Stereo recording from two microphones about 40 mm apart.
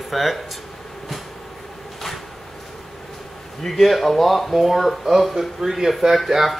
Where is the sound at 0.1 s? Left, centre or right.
Centre.